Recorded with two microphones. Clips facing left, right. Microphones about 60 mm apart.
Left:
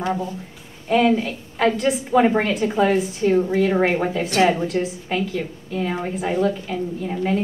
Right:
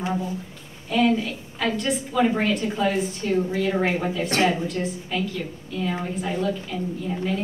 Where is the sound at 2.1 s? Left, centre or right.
Left.